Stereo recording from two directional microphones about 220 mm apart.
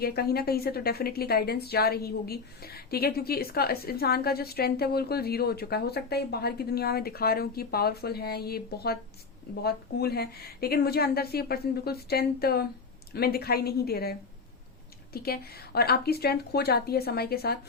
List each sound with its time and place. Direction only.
0.0 s a woman's voice: 45° left (ahead or behind)